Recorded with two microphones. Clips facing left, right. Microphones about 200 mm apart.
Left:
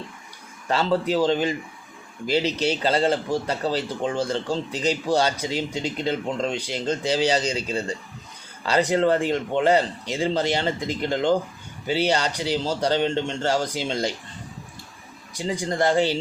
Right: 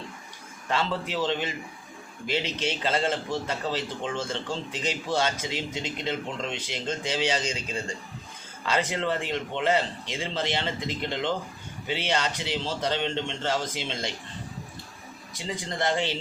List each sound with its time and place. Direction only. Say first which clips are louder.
0.7 s a man's voice: left 7 dB; 40° left (ahead or behind)
15.8 s a man's voice: left 7 dB; 40° left (ahead or behind)